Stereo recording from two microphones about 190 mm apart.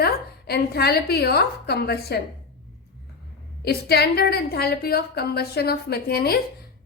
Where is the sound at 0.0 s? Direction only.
55° left (ahead or behind).